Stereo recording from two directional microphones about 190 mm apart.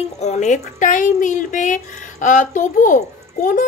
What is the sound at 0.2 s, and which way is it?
A woman's voice, 40° left (ahead or behind).